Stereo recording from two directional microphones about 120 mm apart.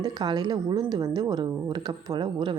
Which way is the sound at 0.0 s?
35° right (ahead or behind).